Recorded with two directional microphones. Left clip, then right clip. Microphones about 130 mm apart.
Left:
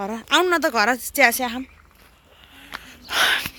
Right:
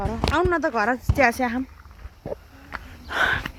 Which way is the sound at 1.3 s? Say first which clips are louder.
Right 1 dB; 5° right (ahead or behind).